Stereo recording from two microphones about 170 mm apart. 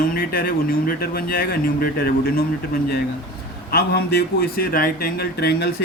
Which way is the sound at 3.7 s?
65° left (ahead or behind).